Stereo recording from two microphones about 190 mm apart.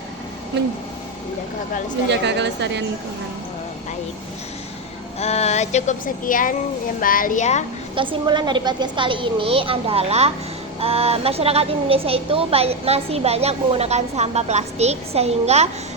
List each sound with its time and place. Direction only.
2.0 s a woman's voice: 65° right (ahead or behind)
5.2 s speech: 35° left (ahead or behind)
7.9 s a woman's voice: 25° right (ahead or behind)